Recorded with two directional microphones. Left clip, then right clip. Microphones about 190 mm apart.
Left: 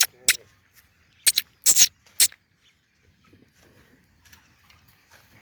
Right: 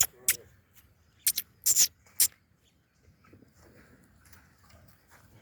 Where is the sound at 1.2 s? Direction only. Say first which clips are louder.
Left 9 dB; 5° right (ahead or behind).